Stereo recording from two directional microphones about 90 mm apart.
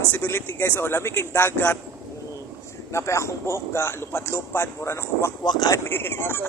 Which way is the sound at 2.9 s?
30° left (ahead or behind).